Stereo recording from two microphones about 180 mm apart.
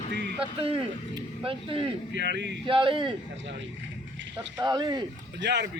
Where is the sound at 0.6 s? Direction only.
30° right (ahead or behind).